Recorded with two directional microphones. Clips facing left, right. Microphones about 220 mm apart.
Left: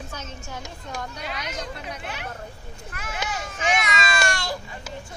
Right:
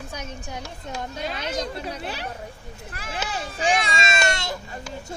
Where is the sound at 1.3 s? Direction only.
30° right (ahead or behind).